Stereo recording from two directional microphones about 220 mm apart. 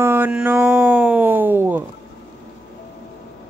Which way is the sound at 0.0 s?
10° right (ahead or behind).